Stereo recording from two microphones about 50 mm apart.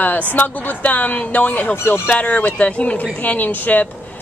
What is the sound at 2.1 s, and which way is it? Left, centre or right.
Speech, left.